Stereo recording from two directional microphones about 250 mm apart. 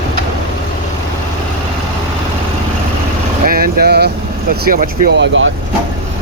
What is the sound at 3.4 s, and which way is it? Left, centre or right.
Vehicle, right.